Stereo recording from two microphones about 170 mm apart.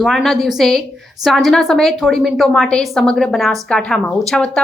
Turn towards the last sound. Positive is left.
turn(degrees=5)  # may be behind; listen again after turning